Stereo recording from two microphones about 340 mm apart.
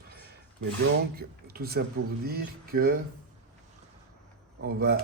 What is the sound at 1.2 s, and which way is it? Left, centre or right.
Speech, right.